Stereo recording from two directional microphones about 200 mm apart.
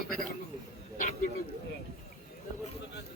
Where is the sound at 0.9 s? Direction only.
40° left (ahead or behind).